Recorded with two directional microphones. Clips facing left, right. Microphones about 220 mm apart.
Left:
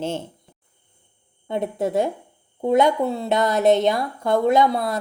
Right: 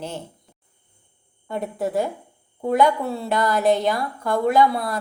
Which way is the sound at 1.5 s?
20° left (ahead or behind).